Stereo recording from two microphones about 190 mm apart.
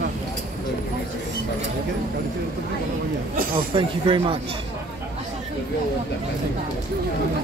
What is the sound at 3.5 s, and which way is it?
Speech, 25° right (ahead or behind).